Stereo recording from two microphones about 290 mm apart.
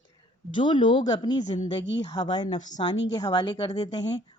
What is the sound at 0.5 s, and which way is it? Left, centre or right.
Speech, centre.